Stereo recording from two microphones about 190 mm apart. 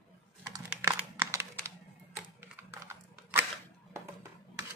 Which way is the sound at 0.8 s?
15° right (ahead or behind).